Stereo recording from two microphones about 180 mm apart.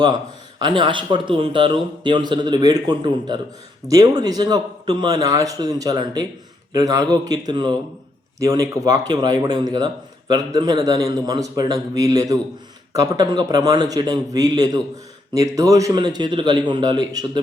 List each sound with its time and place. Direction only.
0.6 s speech: 25° right (ahead or behind)